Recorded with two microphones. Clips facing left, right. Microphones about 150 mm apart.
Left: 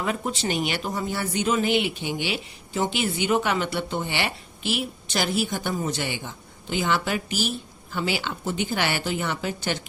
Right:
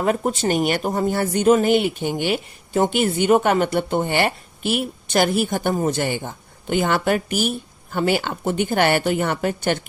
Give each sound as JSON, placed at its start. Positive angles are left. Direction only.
{"t": 0.0, "sound": "speech", "side_deg": -45}